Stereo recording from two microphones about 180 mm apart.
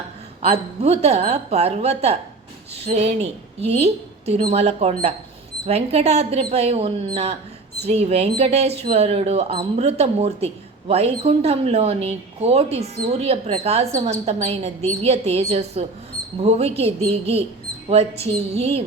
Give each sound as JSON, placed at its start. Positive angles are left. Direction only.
{"t": 0.8, "sound": "speech", "side_deg": -35}